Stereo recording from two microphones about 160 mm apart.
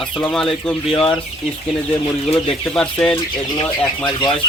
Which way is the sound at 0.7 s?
5° left (ahead or behind).